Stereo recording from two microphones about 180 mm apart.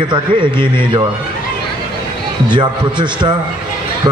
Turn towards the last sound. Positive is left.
turn(degrees=-25)  # may be behind; listen again after turning